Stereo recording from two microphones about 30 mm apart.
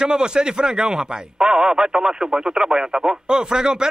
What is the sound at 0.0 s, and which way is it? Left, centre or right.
Speech, right.